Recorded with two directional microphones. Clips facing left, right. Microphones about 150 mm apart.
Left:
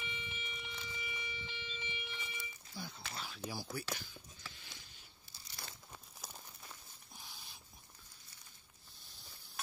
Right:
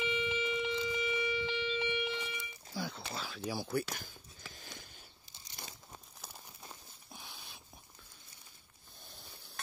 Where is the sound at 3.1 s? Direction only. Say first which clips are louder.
Right 4 dB; 90° right; by 4.9 s 45° right (ahead or behind).